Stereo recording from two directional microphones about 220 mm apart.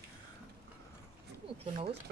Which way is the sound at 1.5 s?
25° right (ahead or behind).